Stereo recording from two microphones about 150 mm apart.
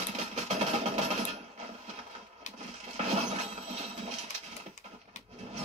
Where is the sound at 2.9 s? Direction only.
45° right (ahead or behind).